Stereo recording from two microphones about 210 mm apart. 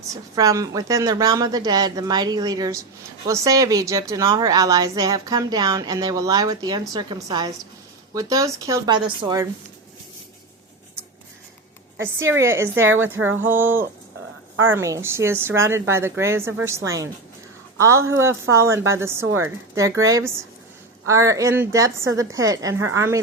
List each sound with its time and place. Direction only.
0.1 s a woman's voice: 15° right (ahead or behind)
12.2 s a woman's voice: 10° right (ahead or behind)
12.8 s speech: 70° right (ahead or behind)
13.5 s a woman's voice: 10° right (ahead or behind)
14.5 s a woman's voice: 70° right (ahead or behind)
14.8 s a woman's voice: 15° right (ahead or behind)
19.2 s a woman's voice: 90° right
20.1 s a woman's voice: 15° right (ahead or behind)